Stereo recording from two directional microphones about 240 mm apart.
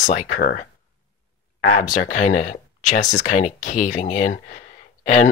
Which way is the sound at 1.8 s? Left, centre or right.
Left.